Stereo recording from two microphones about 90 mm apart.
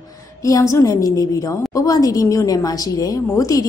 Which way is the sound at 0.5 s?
35° left (ahead or behind).